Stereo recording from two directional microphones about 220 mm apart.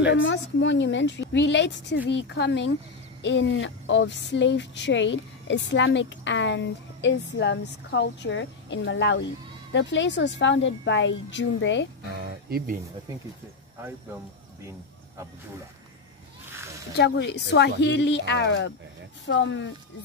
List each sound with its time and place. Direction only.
0.0 s speech: 55° left (ahead or behind)
12.2 s music: 45° right (ahead or behind)
16.9 s speech: 50° left (ahead or behind)